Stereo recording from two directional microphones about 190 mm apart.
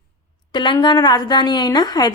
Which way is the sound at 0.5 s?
25° left (ahead or behind).